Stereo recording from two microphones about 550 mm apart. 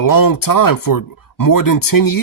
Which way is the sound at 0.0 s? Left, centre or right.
Left.